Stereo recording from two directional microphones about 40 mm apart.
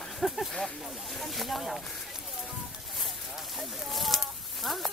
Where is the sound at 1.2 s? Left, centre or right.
Centre.